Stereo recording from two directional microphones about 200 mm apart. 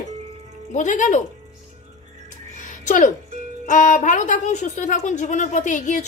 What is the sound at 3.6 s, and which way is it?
Speech, 40° left (ahead or behind).